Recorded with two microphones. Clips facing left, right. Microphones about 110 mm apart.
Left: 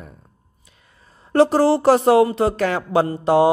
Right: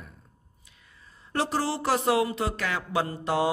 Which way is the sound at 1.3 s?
50° left (ahead or behind).